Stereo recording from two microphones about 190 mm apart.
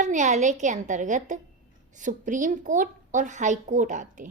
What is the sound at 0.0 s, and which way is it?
A woman's voice, 40° right (ahead or behind).